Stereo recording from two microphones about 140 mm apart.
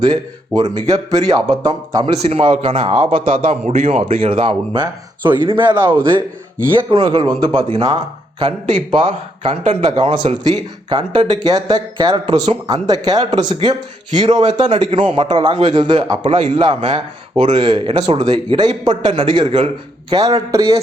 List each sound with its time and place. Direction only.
0.0 s speech: 30° right (ahead or behind)
2.2 s a man's voice: 45° right (ahead or behind); by 20.7 s 25° right (ahead or behind)